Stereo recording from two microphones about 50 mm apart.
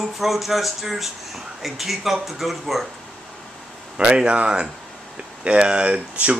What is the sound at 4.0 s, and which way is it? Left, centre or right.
Speech, centre.